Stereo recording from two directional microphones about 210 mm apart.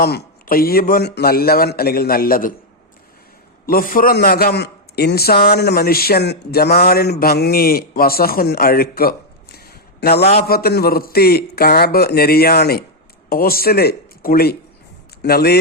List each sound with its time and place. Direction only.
0.0 s a man's voice: 50° left (ahead or behind)
3.7 s a man's voice: 40° left (ahead or behind)